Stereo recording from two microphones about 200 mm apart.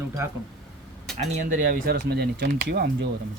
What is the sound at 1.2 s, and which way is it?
Speech, 45° right (ahead or behind).